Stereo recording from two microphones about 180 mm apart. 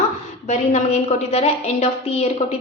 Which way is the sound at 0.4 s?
40° left (ahead or behind).